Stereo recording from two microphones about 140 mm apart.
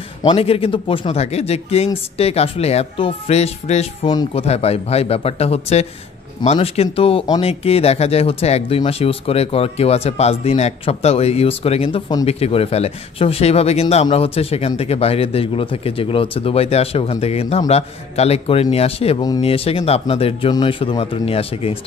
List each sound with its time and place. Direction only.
0.2 s speech: 40° left (ahead or behind)